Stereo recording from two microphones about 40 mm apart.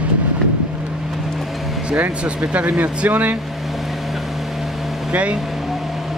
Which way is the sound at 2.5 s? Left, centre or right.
Right.